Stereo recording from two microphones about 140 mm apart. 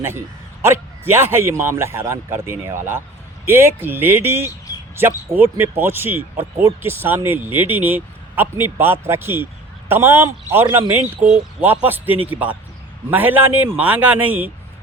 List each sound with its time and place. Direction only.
0.6 s speech: 15° right (ahead or behind)